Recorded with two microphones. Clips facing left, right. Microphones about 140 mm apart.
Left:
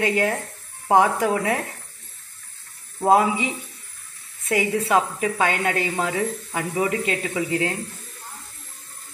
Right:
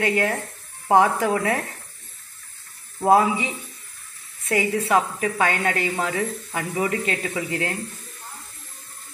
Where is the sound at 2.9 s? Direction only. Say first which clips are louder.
Even; 20° left (ahead or behind).